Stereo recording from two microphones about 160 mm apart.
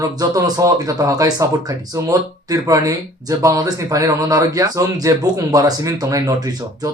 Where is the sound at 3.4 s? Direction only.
20° right (ahead or behind).